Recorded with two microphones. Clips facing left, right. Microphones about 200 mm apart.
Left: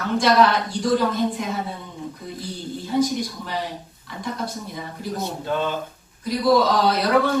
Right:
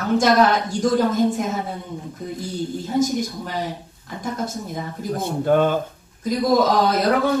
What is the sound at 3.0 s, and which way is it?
Speech, 45° right (ahead or behind).